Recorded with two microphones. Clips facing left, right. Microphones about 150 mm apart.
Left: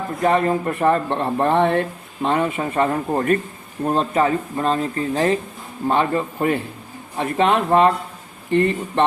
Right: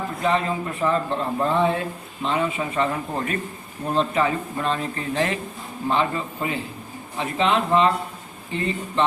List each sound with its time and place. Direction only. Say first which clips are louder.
0.2 s a man's voice: left 5 dB; 50° left (ahead or behind)
2.2 s speech: left 4 dB; 55° left (ahead or behind); by 5.4 s 35° left (ahead or behind)
5.9 s a man's voice: left 4 dB; 50° left (ahead or behind)